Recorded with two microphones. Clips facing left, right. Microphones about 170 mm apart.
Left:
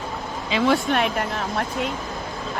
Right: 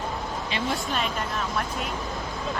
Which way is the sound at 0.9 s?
75° left (ahead or behind).